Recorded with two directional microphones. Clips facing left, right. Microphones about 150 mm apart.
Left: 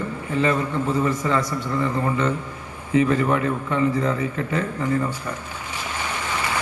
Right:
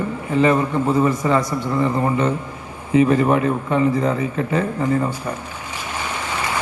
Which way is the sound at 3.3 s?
20° right (ahead or behind).